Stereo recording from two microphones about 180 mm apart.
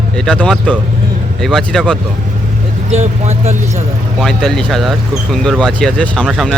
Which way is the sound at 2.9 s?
35° right (ahead or behind).